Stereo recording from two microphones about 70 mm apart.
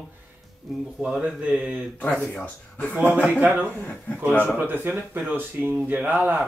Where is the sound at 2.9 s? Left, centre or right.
Right.